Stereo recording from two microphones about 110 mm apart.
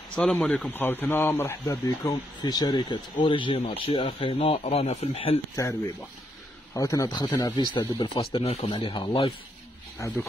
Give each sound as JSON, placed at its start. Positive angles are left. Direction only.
{"t": 0.1, "sound": "speech", "side_deg": 10}
{"t": 1.9, "sound": "speech", "side_deg": 40}
{"t": 6.7, "sound": "speech", "side_deg": 30}
{"t": 8.2, "sound": "speech", "side_deg": 65}
{"t": 8.6, "sound": "speech", "side_deg": 50}
{"t": 10.0, "sound": "speech", "side_deg": 30}